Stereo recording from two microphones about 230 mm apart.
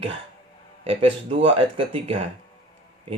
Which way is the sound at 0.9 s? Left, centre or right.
Right.